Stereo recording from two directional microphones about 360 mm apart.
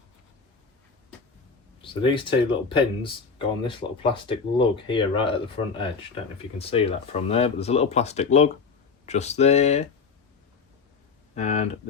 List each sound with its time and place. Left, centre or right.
1.8 s speech: centre
11.3 s speech: centre